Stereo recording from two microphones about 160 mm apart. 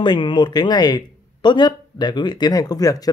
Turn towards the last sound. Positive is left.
turn(degrees=25)  # may be behind; listen again after turning